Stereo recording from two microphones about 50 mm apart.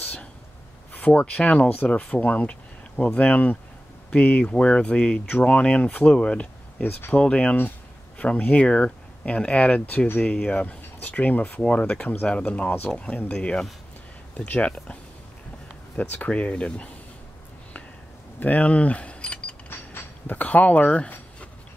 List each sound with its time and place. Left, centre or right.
0.0 s whispering: left
0.9 s speech: left
6.1 s speech: centre
6.8 s speech: left
7.2 s speech: left
11.6 s speech: centre
16.0 s speech: left
18.4 s speech: left
19.9 s a sound: left